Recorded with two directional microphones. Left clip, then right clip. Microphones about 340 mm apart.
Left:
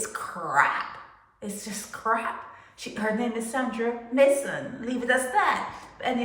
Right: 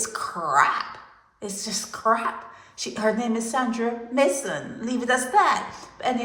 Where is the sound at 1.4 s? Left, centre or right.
Centre.